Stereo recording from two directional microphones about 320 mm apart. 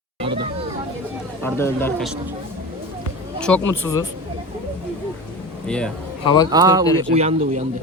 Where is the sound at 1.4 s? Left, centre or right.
Centre.